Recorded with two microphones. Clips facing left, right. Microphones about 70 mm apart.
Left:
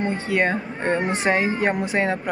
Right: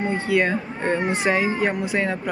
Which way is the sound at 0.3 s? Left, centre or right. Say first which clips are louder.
Right 1 dB; left.